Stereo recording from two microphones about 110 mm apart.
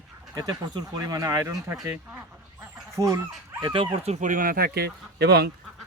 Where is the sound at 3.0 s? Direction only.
35° right (ahead or behind).